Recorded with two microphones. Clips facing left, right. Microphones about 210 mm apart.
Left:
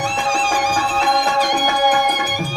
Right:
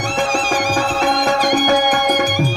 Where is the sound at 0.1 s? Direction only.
45° right (ahead or behind).